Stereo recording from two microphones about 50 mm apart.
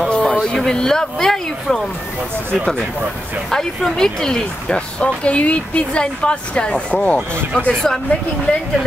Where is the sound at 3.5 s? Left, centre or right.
Centre.